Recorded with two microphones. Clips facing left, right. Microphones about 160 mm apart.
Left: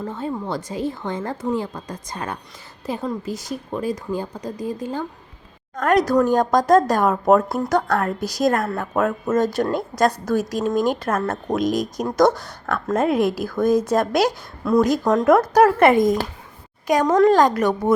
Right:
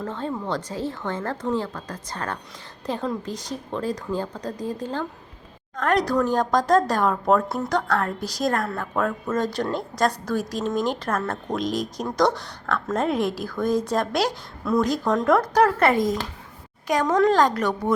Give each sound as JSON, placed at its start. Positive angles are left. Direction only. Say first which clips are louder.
{"t": 0.0, "sound": "a woman's voice", "louder": "left 2 dB", "side_deg": 10}
{"t": 7.8, "sound": "a woman's voice", "louder": "left 3 dB", "side_deg": 10}
{"t": 9.4, "sound": "a woman's voice", "louder": "left 5 dB", "side_deg": 45}
{"t": 10.8, "sound": "a woman's voice", "louder": "left 4 dB", "side_deg": 10}